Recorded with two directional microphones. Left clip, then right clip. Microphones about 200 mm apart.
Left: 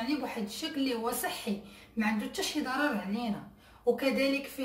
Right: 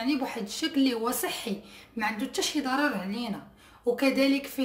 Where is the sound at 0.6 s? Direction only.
45° right (ahead or behind).